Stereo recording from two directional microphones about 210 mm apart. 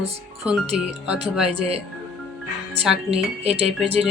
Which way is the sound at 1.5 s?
30° right (ahead or behind).